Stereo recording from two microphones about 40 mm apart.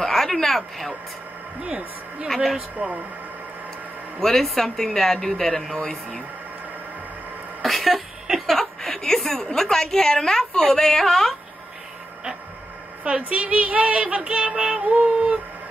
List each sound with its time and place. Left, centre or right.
0.0 s a sound: centre
1.6 s music: right
2.2 s speech: centre
2.8 s speech: right
4.2 s a woman's voice: centre
7.6 s a sound: centre
8.5 s a woman's voice: centre
13.0 s music: right